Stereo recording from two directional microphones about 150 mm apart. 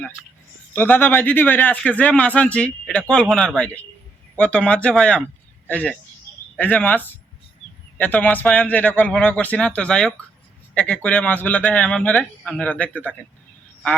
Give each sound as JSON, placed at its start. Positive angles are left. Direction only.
{"t": 0.7, "sound": "speech", "side_deg": 10}